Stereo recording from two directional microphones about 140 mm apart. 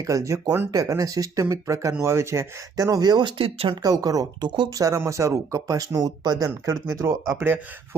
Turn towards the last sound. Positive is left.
turn(degrees=-20)  # may be behind; listen again after turning